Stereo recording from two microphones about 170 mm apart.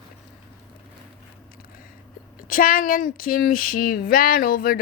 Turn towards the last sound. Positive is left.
turn(degrees=60)  # may be behind; listen again after turning